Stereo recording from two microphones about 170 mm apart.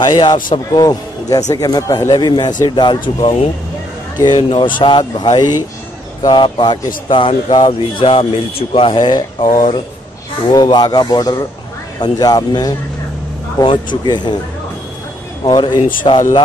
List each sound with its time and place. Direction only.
0.0 s a man's voice: 25° left (ahead or behind)
15.4 s a man's voice: 25° left (ahead or behind)